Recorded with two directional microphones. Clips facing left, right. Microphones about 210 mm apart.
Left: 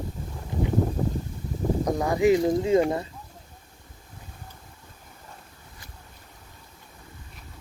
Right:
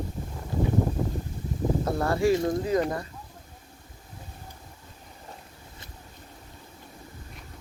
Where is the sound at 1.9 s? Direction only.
15° left (ahead or behind).